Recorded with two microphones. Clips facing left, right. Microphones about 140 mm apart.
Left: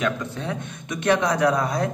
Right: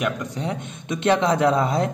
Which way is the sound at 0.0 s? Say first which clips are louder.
Even; 15° right (ahead or behind).